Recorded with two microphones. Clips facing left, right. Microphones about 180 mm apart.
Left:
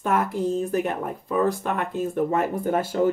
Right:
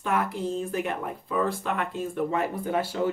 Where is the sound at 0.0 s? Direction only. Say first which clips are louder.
Left 4 dB; 45° left (ahead or behind).